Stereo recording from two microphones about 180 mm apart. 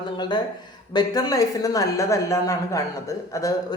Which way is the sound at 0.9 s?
20° left (ahead or behind).